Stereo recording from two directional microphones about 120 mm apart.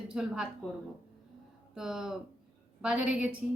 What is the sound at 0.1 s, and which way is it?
Speech, 5° right (ahead or behind).